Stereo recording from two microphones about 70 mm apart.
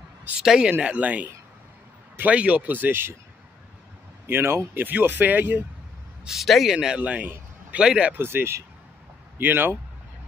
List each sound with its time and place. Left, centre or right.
0.4 s speech: centre
2.3 s speech: centre
4.3 s speech: right
6.2 s speech: centre
7.0 s speech: right
8.1 s speech: right